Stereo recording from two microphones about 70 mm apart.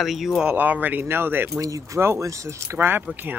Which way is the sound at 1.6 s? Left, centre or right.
Right.